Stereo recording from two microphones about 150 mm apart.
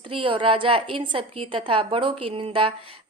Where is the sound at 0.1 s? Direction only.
35° right (ahead or behind).